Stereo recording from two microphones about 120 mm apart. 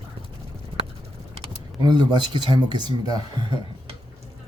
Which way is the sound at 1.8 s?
35° right (ahead or behind).